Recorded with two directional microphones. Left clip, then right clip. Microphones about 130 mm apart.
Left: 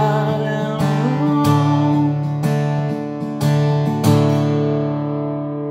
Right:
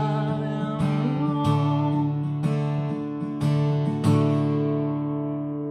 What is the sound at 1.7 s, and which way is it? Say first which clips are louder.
Music: left 8 dB; 20° left (ahead or behind).